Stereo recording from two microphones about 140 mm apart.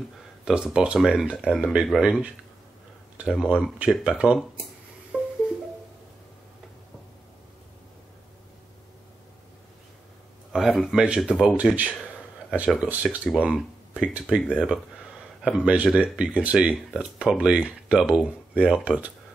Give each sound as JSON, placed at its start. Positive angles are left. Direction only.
{"t": 0.5, "sound": "speech", "side_deg": -5}
{"t": 5.1, "sound": "music", "side_deg": 5}
{"t": 10.5, "sound": "speech", "side_deg": -5}
{"t": 13.3, "sound": "speech", "side_deg": 0}